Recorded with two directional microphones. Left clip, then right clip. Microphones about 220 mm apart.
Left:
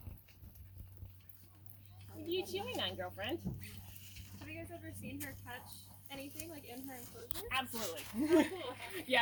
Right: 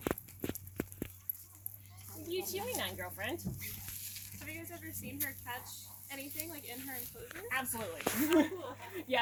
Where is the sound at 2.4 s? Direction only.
40° left (ahead or behind).